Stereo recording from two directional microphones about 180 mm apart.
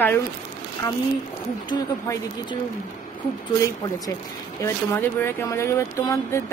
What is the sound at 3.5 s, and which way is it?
Speech, 20° left (ahead or behind).